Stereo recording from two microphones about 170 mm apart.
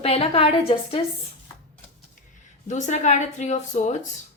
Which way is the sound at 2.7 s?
45° left (ahead or behind).